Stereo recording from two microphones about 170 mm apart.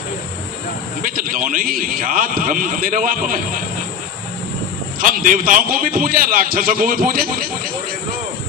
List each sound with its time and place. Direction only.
1.0 s a man's voice: 55° right (ahead or behind)
4.9 s a man's voice: 55° right (ahead or behind)